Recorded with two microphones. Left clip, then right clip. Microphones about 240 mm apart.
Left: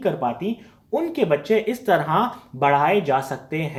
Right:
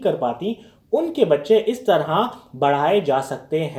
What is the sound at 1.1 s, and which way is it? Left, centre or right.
Speech, left.